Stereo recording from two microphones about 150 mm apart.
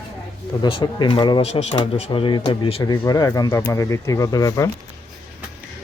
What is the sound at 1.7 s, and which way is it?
Speech, 35° left (ahead or behind).